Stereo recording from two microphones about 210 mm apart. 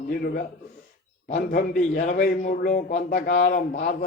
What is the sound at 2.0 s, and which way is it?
A man's voice, 40° left (ahead or behind).